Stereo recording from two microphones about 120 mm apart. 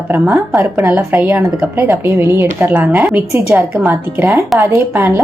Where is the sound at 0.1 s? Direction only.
25° right (ahead or behind).